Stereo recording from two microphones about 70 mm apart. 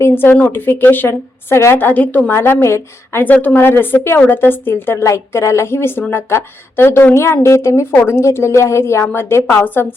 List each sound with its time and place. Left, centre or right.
0.0 s a woman's voice: left
2.3 s a woman's voice: left
5.0 s a woman's voice: left